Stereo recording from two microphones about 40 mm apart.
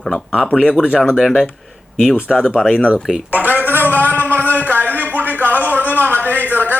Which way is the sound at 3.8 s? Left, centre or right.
Left.